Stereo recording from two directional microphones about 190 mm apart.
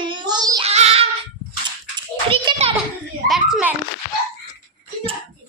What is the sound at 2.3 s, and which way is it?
Speech, 30° right (ahead or behind).